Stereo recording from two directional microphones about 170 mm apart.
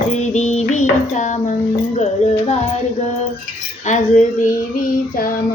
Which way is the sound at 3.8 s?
45° left (ahead or behind).